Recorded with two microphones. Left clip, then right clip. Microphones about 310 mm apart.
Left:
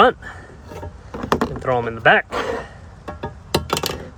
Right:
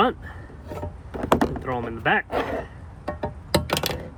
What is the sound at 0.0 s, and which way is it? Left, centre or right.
Speech, left.